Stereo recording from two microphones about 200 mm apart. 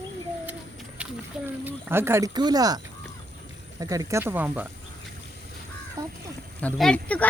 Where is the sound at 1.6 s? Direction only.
10° right (ahead or behind).